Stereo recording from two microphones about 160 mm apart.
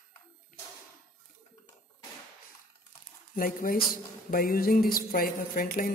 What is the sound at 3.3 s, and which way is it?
Speech, 65° left (ahead or behind).